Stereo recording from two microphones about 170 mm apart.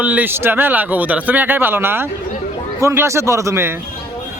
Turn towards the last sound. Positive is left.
turn(degrees=-15)  # may be behind; listen again after turning